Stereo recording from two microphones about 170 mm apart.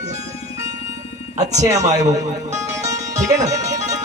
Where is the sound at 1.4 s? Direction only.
45° right (ahead or behind).